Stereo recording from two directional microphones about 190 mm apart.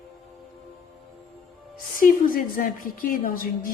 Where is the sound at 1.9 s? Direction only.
45° left (ahead or behind).